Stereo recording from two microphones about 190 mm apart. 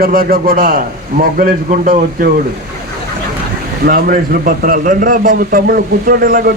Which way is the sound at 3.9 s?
50° right (ahead or behind).